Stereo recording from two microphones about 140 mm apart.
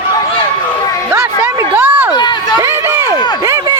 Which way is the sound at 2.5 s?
20° right (ahead or behind).